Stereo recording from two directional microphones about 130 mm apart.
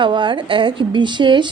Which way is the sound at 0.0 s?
40° right (ahead or behind).